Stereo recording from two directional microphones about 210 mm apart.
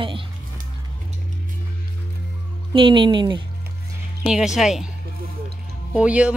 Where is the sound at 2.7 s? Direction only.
25° right (ahead or behind).